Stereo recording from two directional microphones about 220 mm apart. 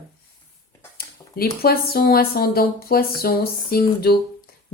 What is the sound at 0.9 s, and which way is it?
Speech, 45° left (ahead or behind).